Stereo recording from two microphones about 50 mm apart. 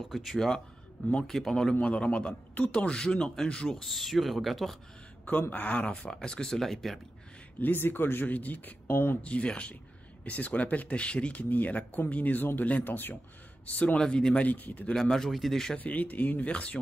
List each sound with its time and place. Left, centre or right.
0.1 s speech: centre
1.8 s speech: left
3.7 s speech: centre
5.5 s speech: left
6.0 s speech: centre
7.6 s speech: left
9.2 s speech: left
11.5 s speech: left
13.9 s speech: centre
14.4 s speech: left
15.0 s speech: centre
15.8 s speech: left